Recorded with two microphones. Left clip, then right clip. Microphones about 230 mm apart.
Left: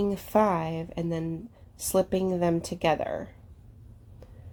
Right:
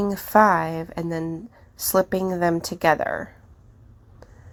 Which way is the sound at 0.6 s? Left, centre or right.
Right.